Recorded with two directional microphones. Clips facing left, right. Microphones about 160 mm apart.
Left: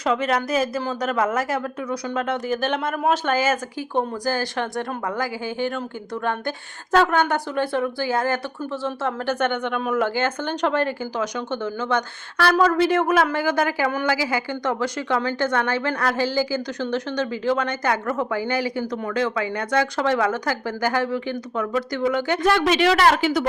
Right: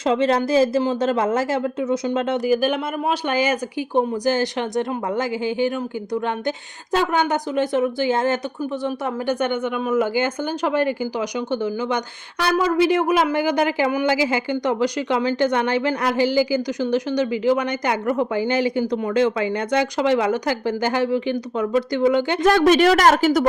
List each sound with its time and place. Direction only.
0.0 s speech: 30° right (ahead or behind)
2.5 s a woman's voice: 10° right (ahead or behind)
6.9 s speech: 15° right (ahead or behind)
8.8 s a woman's voice: 10° right (ahead or behind)
22.4 s speech: 45° right (ahead or behind)